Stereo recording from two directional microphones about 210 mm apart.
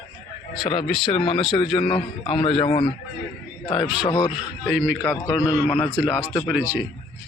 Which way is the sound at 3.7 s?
5° right (ahead or behind).